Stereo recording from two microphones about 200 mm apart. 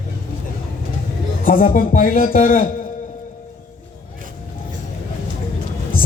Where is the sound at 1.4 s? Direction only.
45° left (ahead or behind).